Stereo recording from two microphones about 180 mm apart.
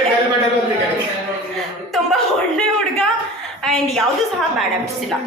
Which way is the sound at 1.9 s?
5° left (ahead or behind).